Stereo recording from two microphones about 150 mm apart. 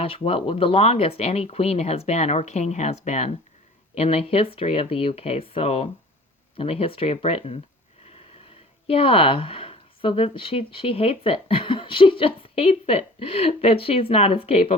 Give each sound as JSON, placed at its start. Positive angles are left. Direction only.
{"t": 0.0, "sound": "speech", "side_deg": 40}
{"t": 8.9, "sound": "speech", "side_deg": 40}